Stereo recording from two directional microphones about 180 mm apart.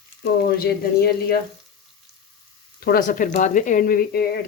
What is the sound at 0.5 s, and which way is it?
Speech, 60° left (ahead or behind).